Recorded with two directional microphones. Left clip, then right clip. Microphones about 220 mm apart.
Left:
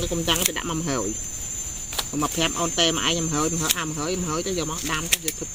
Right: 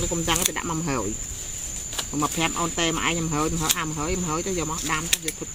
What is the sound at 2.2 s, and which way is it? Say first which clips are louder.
Speech: even; centre (ahead or behind).